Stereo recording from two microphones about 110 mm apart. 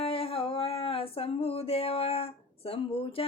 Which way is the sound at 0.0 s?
60° left (ahead or behind).